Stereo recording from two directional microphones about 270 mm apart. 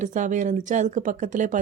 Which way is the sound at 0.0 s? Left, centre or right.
Right.